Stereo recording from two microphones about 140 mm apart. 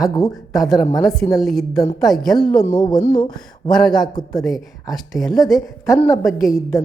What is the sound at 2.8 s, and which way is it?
Speech, 25° left (ahead or behind).